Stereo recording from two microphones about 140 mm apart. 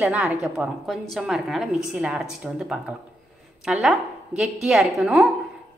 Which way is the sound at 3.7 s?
5° right (ahead or behind).